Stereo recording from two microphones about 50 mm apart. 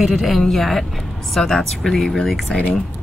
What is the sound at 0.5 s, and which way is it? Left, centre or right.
Speech, centre.